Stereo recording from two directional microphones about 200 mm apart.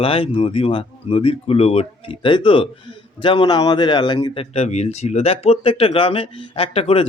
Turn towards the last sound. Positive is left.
turn(degrees=30)  # may be behind; listen again after turning